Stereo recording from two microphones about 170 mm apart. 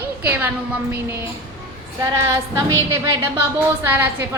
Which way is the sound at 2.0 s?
15° right (ahead or behind).